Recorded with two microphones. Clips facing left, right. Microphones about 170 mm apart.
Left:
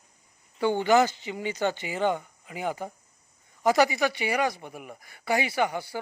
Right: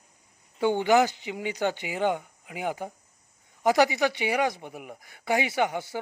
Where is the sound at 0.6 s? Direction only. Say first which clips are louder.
Even; 15° right (ahead or behind).